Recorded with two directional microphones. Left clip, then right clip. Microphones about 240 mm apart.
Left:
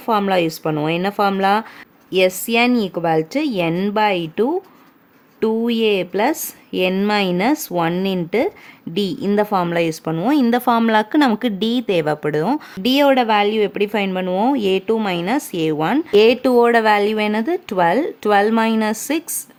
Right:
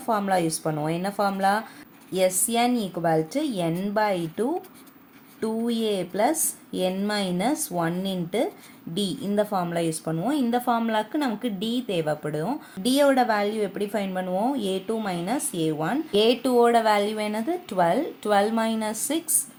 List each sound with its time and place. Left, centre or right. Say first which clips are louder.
0.0 s speech: left 7 dB; left